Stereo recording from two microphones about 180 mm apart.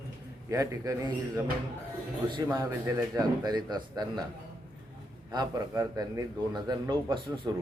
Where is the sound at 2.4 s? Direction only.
15° right (ahead or behind).